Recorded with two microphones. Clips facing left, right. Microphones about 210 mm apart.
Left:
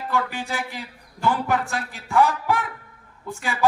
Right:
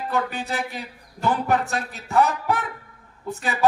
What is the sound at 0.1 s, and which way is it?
A man's voice, 20° right (ahead or behind).